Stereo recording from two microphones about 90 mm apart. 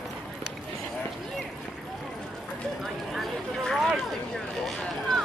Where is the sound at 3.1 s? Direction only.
5° left (ahead or behind).